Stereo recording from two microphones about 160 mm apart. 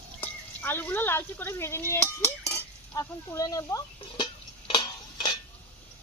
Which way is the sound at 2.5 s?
20° left (ahead or behind).